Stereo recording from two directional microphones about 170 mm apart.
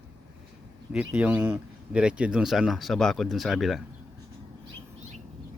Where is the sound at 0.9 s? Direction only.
5° right (ahead or behind).